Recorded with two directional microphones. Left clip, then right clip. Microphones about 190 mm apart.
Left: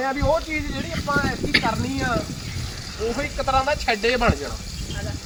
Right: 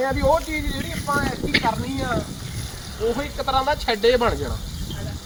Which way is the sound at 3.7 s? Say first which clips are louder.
Right 2 dB; 30° left (ahead or behind).